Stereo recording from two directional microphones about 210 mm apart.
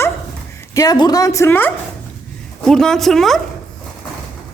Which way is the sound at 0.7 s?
15° left (ahead or behind).